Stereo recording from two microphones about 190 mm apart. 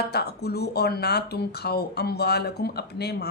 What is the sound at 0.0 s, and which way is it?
Speech, 60° left (ahead or behind).